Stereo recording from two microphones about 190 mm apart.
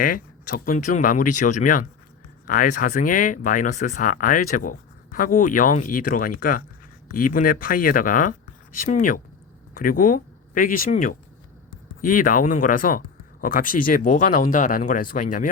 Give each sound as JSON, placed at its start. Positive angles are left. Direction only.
{"t": 0.0, "sound": "speech", "side_deg": 50}